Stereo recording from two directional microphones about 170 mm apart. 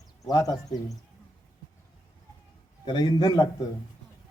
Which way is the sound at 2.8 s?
25° left (ahead or behind).